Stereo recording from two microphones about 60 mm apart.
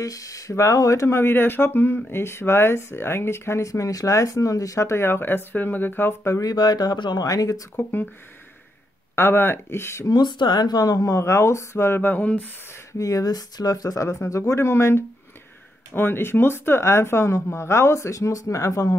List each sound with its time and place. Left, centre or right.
0.0 s speech: left
1.0 s speech: left
6.4 s speech: left
7.7 s speech: left
9.1 s speech: left
10.7 s speech: left
11.1 s speech: left
12.1 s speech: left
13.0 s speech: left
14.2 s speech: left
14.6 s speech: left